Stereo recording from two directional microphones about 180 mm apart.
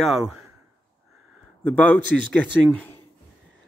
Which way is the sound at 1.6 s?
10° left (ahead or behind).